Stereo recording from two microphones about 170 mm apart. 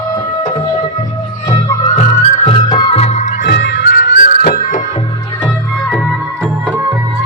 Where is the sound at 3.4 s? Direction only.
85° left; by 4.8 s 50° left (ahead or behind).